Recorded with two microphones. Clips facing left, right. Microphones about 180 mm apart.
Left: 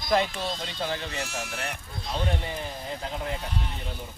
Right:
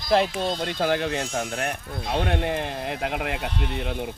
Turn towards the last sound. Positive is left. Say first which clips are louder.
# right 5 dB
turn(degrees=-75)  # may be behind; listen again after turning